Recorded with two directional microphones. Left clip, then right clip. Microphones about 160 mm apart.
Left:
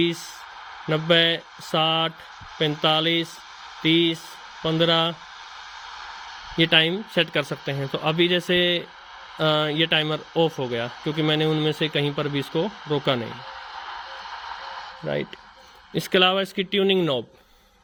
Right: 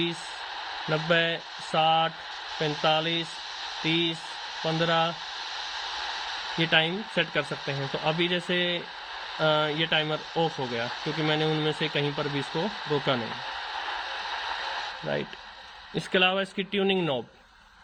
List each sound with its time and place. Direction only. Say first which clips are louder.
0.9 s speech: left 6 dB; 45° left (ahead or behind)
5.9 s a sound: right 5 dB; 25° right (ahead or behind)
6.6 s speech: left 6 dB; 45° left (ahead or behind)
10.8 s speech: left 2 dB; 25° right (ahead or behind)
11.2 s speech: left 4 dB; 45° left (ahead or behind)
13.7 s a sound: right 2 dB; 20° right (ahead or behind)
16.0 s speech: left 5 dB; 45° left (ahead or behind)